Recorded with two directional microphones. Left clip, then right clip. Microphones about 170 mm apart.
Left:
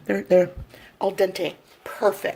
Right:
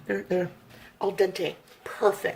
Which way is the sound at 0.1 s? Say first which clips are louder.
Left 9 dB; 55° left (ahead or behind).